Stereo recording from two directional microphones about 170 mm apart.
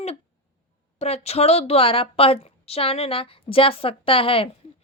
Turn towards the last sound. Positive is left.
turn(degrees=35)  # may be behind; listen again after turning